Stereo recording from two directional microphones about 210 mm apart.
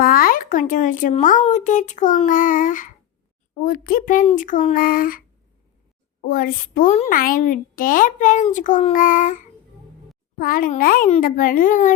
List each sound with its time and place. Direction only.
0.0 s a woman's voice: 45° left (ahead or behind)
6.2 s a woman's voice: 40° left (ahead or behind)